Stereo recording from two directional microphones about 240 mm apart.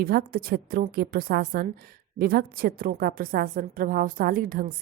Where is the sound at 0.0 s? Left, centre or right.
Right.